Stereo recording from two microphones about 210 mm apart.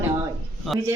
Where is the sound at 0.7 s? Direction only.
Centre (ahead or behind).